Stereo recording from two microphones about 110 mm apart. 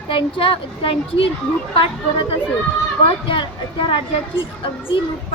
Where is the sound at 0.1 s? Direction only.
55° left (ahead or behind).